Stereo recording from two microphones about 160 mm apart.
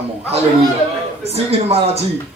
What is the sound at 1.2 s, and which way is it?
Speech, 40° right (ahead or behind).